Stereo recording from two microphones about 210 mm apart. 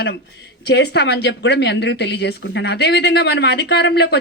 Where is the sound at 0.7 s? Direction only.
50° left (ahead or behind).